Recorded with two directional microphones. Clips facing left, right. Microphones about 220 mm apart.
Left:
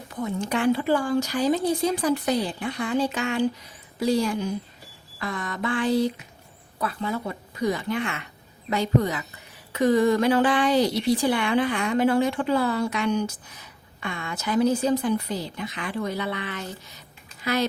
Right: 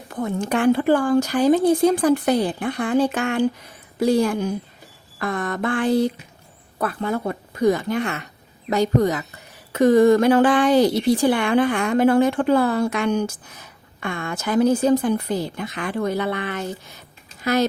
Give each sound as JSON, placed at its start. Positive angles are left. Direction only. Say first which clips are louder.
{"t": 0.1, "sound": "speech", "louder": "right 4 dB", "side_deg": -55}